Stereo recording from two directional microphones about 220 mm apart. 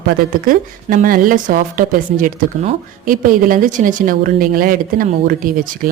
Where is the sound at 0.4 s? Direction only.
40° right (ahead or behind).